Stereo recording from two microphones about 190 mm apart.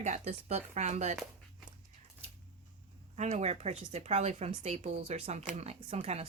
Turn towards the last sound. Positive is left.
turn(degrees=-35)  # may be behind; listen again after turning